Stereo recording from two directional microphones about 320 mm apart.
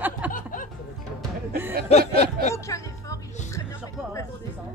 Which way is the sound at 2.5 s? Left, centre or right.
Centre.